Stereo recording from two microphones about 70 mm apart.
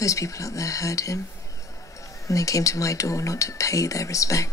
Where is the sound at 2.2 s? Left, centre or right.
Left.